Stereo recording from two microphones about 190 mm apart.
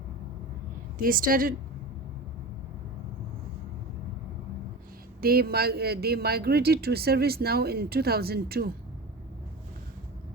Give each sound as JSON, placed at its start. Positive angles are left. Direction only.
{"t": 0.9, "sound": "speech", "side_deg": -50}
{"t": 5.2, "sound": "a man's voice", "side_deg": -55}